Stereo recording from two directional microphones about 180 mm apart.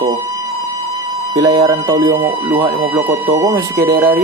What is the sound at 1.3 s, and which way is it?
Speech, 20° right (ahead or behind).